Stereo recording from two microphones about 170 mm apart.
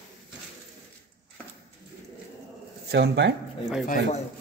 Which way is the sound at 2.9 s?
80° right.